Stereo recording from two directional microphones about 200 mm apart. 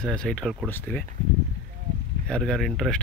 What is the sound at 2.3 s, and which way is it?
Speech, 5° left (ahead or behind).